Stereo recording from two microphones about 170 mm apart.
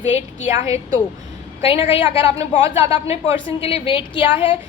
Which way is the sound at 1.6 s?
35° left (ahead or behind).